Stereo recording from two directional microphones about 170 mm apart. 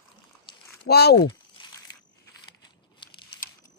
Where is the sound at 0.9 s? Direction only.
70° left (ahead or behind).